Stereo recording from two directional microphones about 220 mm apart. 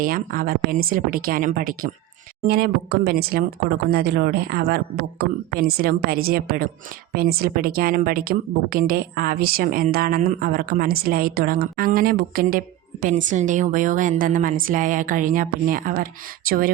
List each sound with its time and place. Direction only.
0.0 s a woman's voice: 40° right (ahead or behind)